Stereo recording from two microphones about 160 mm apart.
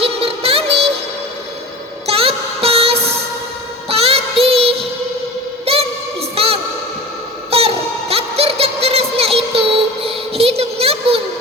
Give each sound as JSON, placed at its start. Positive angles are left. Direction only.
{"t": 0.0, "sound": "music", "side_deg": -35}
{"t": 2.0, "sound": "music", "side_deg": -40}
{"t": 3.8, "sound": "child singing", "side_deg": -40}
{"t": 5.6, "sound": "music", "side_deg": -40}
{"t": 6.3, "sound": "a sound", "side_deg": -40}